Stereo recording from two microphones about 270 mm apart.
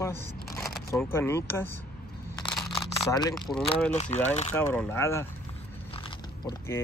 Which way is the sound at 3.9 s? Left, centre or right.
Left.